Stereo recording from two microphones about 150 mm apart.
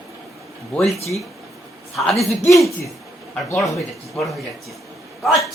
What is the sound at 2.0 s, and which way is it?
Speech, centre (ahead or behind).